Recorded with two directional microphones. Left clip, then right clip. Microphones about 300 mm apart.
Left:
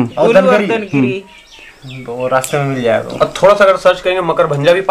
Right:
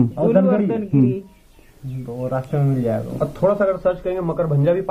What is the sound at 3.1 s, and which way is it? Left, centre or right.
A man's voice, centre.